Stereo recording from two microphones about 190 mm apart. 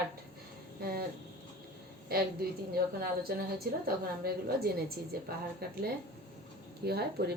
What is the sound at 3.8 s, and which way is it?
A woman's voice, 55° right (ahead or behind).